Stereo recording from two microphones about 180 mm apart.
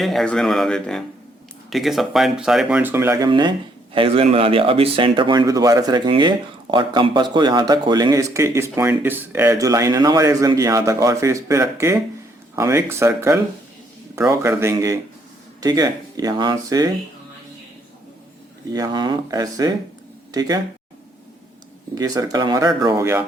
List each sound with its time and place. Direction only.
0.0 s speech: centre (ahead or behind)
3.2 s speech: 25° right (ahead or behind)
18.7 s speech: 20° right (ahead or behind)
21.9 s speech: 20° right (ahead or behind)